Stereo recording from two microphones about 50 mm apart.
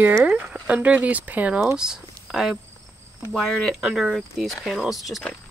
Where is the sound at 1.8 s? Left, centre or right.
Centre.